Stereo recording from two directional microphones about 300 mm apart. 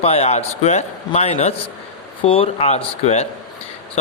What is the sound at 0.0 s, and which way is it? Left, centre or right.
A man's voice, left.